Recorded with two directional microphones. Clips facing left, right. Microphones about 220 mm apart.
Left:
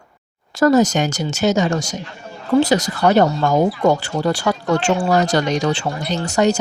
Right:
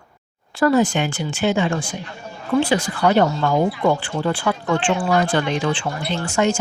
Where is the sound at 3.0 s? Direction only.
45° left (ahead or behind).